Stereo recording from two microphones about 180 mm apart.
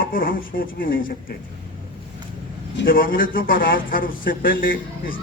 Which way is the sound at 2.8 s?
50° left (ahead or behind).